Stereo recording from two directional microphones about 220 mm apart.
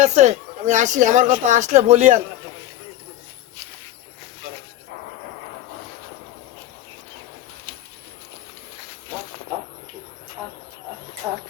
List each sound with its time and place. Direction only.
0.0 s speech: 30° right (ahead or behind)